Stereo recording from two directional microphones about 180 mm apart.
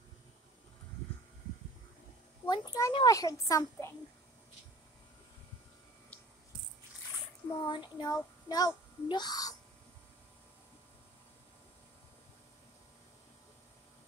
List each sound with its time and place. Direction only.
2.4 s a child's voice: 25° left (ahead or behind)
7.4 s a child's voice: 25° left (ahead or behind)